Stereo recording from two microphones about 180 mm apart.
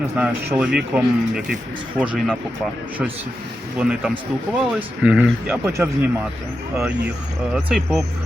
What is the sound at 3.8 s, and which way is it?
Speech, 5° right (ahead or behind).